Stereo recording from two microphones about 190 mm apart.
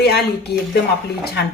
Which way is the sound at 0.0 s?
60° left (ahead or behind).